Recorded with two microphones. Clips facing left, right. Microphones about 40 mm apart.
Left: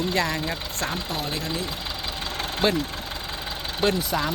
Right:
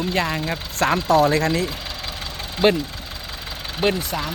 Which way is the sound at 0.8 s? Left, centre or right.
Right.